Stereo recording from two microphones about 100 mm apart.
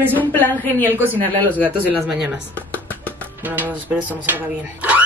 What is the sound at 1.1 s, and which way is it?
Speech, 15° left (ahead or behind).